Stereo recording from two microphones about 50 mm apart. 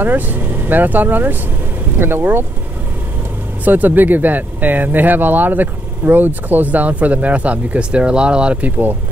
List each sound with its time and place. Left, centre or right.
0.0 s speech: right
3.6 s speech: right